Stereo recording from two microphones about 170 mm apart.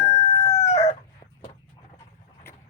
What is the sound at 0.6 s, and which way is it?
Chicken, 40° left (ahead or behind).